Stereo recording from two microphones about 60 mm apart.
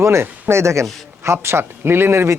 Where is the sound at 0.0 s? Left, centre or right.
Right.